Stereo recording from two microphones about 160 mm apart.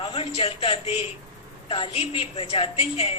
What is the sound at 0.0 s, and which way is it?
A man's voice, 35° left (ahead or behind).